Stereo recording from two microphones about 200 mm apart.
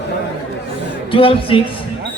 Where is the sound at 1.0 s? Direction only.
25° left (ahead or behind).